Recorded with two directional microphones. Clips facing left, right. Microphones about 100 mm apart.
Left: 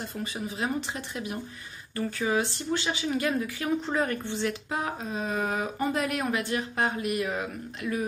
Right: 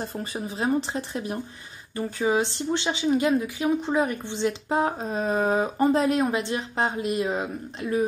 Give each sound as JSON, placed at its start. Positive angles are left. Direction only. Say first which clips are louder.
{"t": 0.2, "sound": "speech", "louder": "right 2 dB", "side_deg": -30}
{"t": 2.0, "sound": "speech", "louder": "right 3 dB", "side_deg": -20}